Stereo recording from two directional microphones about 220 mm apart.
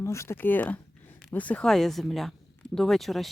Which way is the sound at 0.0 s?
15° left (ahead or behind).